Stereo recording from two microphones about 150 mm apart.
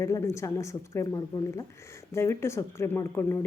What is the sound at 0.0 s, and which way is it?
A woman's voice, 20° left (ahead or behind).